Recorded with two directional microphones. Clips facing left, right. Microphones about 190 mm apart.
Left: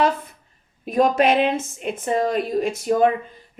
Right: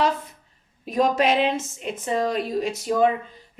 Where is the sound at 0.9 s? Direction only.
55° left (ahead or behind).